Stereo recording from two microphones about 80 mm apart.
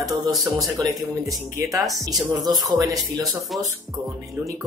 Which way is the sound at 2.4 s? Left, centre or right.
Right.